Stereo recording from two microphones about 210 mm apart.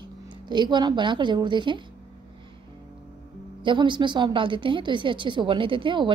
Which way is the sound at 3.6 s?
20° right (ahead or behind).